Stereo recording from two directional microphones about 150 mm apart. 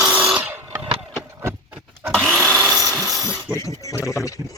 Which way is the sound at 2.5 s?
15° right (ahead or behind).